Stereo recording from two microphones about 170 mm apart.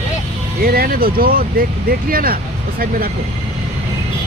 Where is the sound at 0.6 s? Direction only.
60° right (ahead or behind).